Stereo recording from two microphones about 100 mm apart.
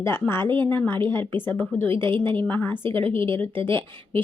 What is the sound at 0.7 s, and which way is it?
Speech, 20° left (ahead or behind).